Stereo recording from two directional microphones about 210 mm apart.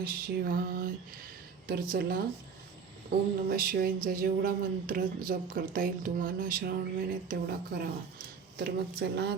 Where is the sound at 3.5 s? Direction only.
45° right (ahead or behind).